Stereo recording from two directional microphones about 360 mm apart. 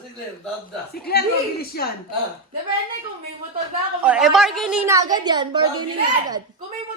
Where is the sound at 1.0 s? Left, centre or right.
Left.